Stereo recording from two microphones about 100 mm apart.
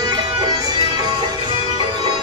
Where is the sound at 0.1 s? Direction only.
45° right (ahead or behind).